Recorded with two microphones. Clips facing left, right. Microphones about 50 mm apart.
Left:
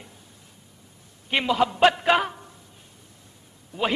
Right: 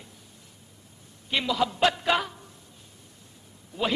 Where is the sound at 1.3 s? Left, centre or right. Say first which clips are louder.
Left 4 dB; left.